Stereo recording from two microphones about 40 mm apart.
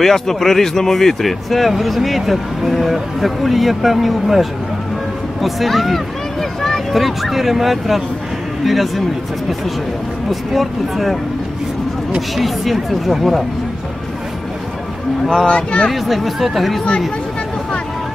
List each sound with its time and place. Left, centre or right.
0.0 s speech: centre
6.6 s a sound: centre
7.0 s speech: centre
10.5 s speech: centre
12.4 s speech: centre
15.4 s speech: left
15.9 s speech: centre